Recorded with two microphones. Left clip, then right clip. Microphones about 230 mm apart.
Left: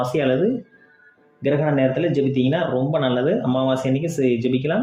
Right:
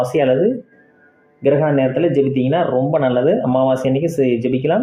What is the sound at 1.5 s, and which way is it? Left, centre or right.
Speech, centre.